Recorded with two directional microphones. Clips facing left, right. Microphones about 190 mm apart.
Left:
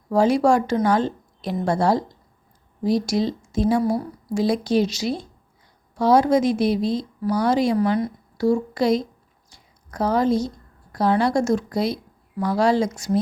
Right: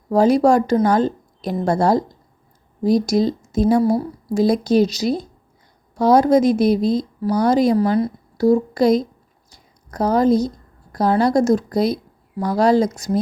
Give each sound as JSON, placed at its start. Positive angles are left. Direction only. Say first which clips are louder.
{"t": 0.1, "sound": "a woman's voice", "louder": "right 3 dB", "side_deg": -40}
{"t": 9.5, "sound": "a sound", "louder": "right 3 dB", "side_deg": -40}
{"t": 10.9, "sound": "a woman's voice", "louder": "right 3 dB", "side_deg": -40}